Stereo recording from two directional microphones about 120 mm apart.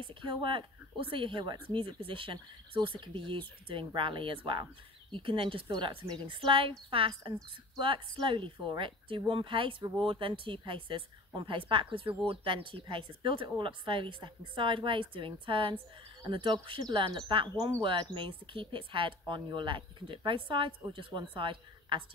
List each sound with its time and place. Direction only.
0.0 s a woman's voice: 45° right (ahead or behind)